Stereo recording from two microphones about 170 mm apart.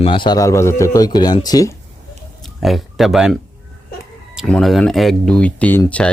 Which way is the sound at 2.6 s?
Centre (ahead or behind).